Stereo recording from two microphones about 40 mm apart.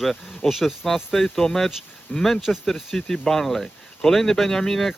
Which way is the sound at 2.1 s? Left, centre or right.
Left.